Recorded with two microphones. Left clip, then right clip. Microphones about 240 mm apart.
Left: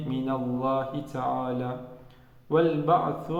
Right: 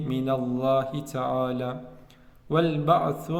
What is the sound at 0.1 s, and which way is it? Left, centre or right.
A man's voice, right.